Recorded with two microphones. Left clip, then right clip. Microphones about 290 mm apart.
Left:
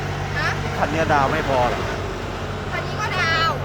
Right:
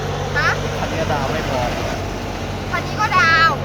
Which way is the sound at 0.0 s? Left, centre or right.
Right.